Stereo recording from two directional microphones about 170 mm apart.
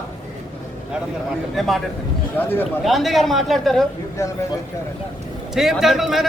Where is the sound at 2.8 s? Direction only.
Centre (ahead or behind).